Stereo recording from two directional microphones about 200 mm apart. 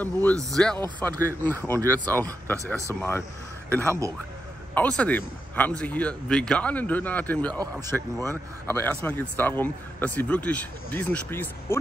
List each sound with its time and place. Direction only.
0.0 s speech: 10° left (ahead or behind)
2.5 s speech: 15° right (ahead or behind)
2.9 s speech: 10° left (ahead or behind)
3.8 s speech: 15° right (ahead or behind)
4.7 s speech: 5° left (ahead or behind)
7.8 s speech: 15° right (ahead or behind)
8.6 s speech: 10° left (ahead or behind)